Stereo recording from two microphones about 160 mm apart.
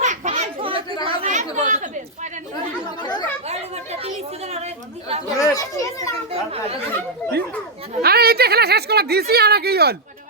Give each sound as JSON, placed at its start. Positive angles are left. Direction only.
{"t": 0.0, "sound": "children playing", "side_deg": -45}
{"t": 0.6, "sound": "chatter", "side_deg": -35}
{"t": 1.0, "sound": "chatter", "side_deg": -45}
{"t": 3.0, "sound": "chatter", "side_deg": 25}
{"t": 3.5, "sound": "children playing", "side_deg": -40}
{"t": 4.5, "sound": "chatter", "side_deg": -40}
{"t": 5.4, "sound": "children playing", "side_deg": 20}
{"t": 8.0, "sound": "a sound", "side_deg": -75}